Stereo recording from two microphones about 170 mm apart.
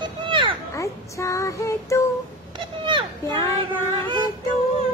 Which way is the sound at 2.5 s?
25° right (ahead or behind).